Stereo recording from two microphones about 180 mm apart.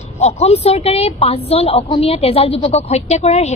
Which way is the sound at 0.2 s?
35° left (ahead or behind).